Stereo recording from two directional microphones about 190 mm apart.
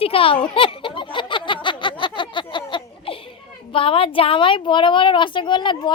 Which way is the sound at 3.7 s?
30° left (ahead or behind).